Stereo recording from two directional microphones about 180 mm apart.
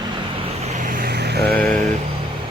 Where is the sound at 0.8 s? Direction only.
50° right (ahead or behind); by 1.6 s 65° right (ahead or behind).